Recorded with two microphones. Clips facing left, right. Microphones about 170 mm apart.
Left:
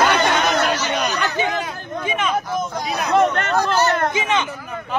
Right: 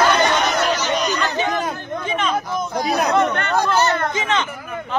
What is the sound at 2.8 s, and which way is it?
Speech, 40° right (ahead or behind).